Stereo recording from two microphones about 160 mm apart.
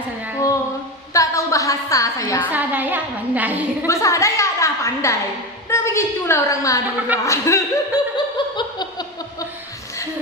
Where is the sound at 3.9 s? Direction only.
20° left (ahead or behind).